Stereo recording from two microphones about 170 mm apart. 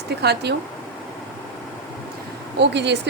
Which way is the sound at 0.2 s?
75° right (ahead or behind).